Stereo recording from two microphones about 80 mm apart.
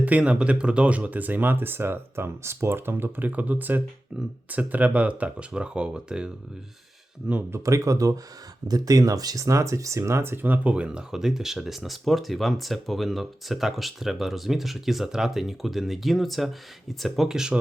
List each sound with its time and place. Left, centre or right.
0.0 s speech: centre
4.1 s speech: centre
7.5 s speech: right; by 17.6 s centre